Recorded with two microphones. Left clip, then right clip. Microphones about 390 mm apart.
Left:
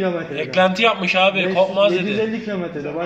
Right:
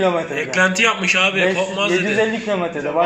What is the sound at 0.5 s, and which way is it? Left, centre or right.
A man's voice, centre.